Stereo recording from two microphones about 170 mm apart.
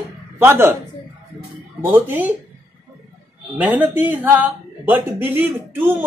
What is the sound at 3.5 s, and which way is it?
A woman's voice, 10° right (ahead or behind).